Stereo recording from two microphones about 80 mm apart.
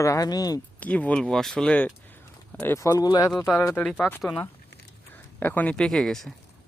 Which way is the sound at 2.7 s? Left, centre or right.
Left.